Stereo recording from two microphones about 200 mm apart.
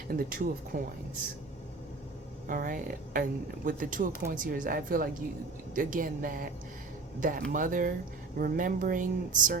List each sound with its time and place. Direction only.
0.1 s speech: 45° right (ahead or behind)
2.5 s speech: 45° right (ahead or behind)